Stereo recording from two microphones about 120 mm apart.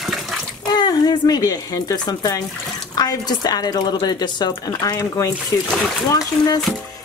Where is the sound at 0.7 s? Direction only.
35° left (ahead or behind).